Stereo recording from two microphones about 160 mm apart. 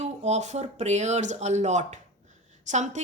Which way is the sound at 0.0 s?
45° right (ahead or behind).